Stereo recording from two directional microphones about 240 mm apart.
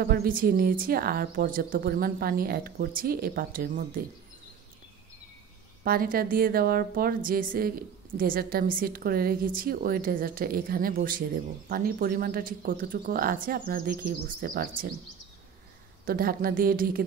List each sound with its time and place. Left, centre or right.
0.0 s speech: right
5.9 s speech: right
16.1 s speech: right